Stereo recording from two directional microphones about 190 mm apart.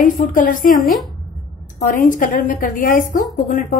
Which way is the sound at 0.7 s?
Centre (ahead or behind).